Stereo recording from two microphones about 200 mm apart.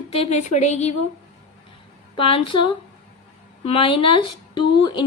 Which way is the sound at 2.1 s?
25° left (ahead or behind).